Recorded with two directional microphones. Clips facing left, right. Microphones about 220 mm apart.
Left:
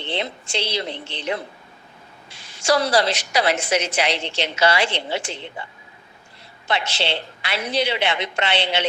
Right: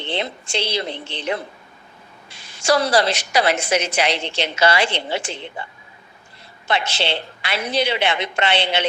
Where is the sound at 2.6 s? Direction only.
50° right (ahead or behind).